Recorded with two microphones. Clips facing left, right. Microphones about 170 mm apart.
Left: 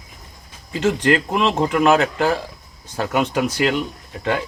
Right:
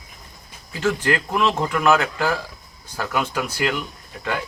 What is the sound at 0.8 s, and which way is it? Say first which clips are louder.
Speech: left 4 dB; 25° left (ahead or behind).